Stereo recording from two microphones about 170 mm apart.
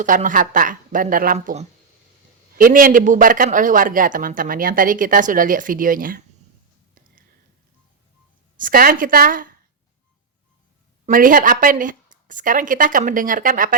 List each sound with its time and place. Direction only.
0.0 s a man's voice: 50° right (ahead or behind)
2.6 s a man's voice: 55° right (ahead or behind)
8.5 s a woman's voice: 55° right (ahead or behind)
11.0 s a man's voice: 55° right (ahead or behind)